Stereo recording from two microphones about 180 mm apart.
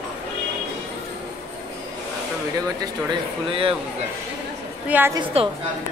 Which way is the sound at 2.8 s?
25° right (ahead or behind).